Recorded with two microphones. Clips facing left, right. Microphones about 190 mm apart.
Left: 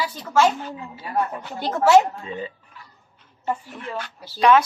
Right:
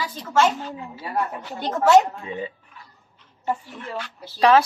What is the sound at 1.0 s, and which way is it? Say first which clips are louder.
A woman's voice: left 2 dB; centre (ahead or behind).